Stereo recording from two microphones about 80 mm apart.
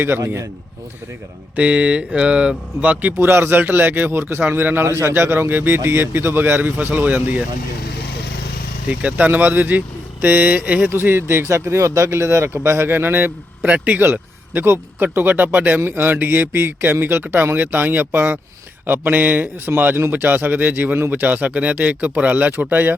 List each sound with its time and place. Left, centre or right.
1.5 s speech: centre
3.2 s speech: right
8.9 s speech: centre
10.9 s speech: right